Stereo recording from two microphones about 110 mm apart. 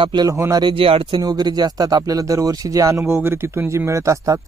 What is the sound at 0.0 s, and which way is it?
Speech, 45° right (ahead or behind).